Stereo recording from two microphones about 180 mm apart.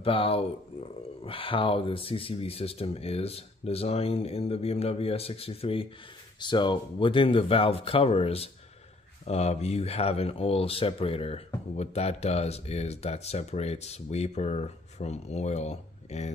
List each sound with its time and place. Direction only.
0.0 s speech: 30° left (ahead or behind)